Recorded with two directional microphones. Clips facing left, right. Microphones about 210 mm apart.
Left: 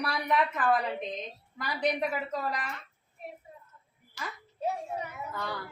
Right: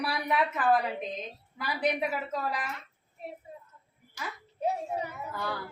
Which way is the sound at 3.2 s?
25° right (ahead or behind).